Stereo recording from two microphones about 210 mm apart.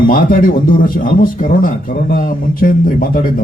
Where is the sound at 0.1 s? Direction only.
45° left (ahead or behind).